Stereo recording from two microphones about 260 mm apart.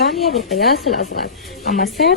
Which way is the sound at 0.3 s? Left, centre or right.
Left.